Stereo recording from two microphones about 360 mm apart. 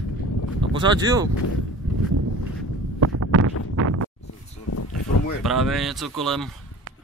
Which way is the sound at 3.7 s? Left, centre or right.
Right.